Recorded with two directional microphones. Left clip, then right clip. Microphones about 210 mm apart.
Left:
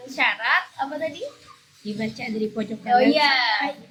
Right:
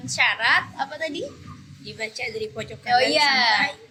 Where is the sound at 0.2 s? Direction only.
45° right (ahead or behind).